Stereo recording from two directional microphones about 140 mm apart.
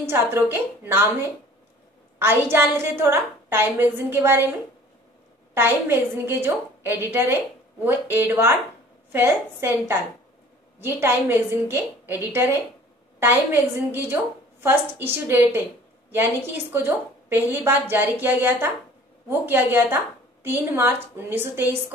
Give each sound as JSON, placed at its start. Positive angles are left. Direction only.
{"t": 0.0, "sound": "a woman's voice", "side_deg": -15}
{"t": 2.1, "sound": "a woman's voice", "side_deg": -15}
{"t": 5.5, "sound": "a woman's voice", "side_deg": -15}